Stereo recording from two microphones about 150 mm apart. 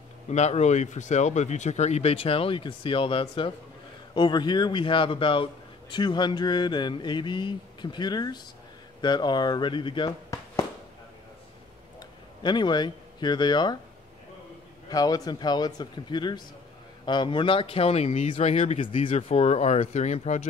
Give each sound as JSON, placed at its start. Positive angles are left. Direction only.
{"t": 0.3, "sound": "a man's voice", "side_deg": 50}
{"t": 12.4, "sound": "speech", "side_deg": 30}
{"t": 14.9, "sound": "speech", "side_deg": 25}